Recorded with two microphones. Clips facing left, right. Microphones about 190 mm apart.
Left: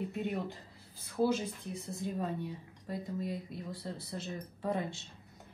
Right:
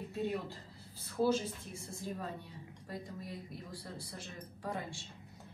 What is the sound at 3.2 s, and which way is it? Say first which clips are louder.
Speech: left 7 dB; 25° left (ahead or behind).